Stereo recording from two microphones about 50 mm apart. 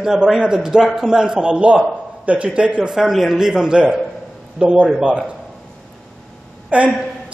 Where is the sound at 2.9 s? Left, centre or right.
Centre.